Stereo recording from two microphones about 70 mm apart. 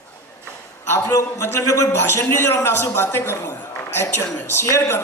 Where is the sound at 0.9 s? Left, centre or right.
Left.